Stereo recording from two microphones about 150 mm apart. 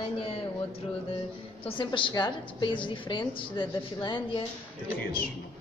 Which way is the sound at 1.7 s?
35° left (ahead or behind).